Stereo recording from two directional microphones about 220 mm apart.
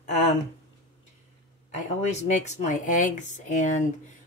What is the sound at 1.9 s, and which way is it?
Speech, 30° left (ahead or behind).